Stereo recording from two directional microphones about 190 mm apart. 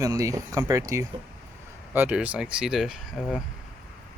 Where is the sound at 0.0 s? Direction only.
15° right (ahead or behind).